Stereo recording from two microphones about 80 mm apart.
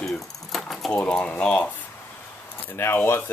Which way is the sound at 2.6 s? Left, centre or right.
Left.